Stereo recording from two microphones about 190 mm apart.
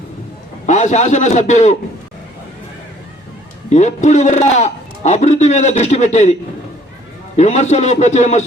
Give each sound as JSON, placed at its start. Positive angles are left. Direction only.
{"t": 0.7, "sound": "a man's voice", "side_deg": 40}
{"t": 3.7, "sound": "a man's voice", "side_deg": 35}
{"t": 7.3, "sound": "a man's voice", "side_deg": 35}